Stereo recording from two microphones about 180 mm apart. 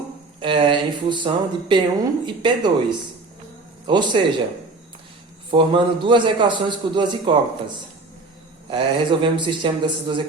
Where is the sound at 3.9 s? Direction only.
25° right (ahead or behind).